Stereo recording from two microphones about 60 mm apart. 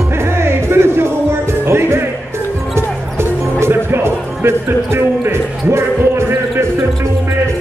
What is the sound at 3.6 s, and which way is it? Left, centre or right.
Music, right.